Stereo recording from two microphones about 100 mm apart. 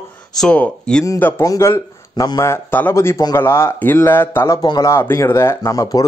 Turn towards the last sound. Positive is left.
turn(degrees=35)  # may be behind; listen again after turning